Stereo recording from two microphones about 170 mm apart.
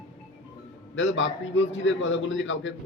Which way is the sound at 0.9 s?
90° left.